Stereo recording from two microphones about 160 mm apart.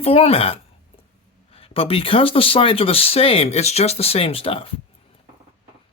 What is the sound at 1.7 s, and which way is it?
Speech, 35° left (ahead or behind).